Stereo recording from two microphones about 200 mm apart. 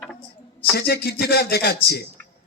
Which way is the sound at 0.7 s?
55° left (ahead or behind).